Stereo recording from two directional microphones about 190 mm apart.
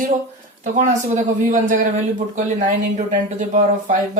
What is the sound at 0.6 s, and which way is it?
Speech, 40° right (ahead or behind).